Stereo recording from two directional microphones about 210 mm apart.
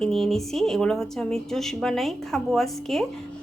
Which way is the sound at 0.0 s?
Centre (ahead or behind).